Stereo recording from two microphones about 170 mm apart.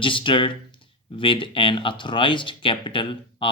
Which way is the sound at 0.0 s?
30° left (ahead or behind).